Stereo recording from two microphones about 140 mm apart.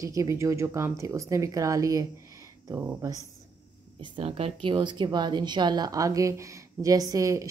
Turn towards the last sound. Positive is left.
turn(degrees=-25)  # may be behind; listen again after turning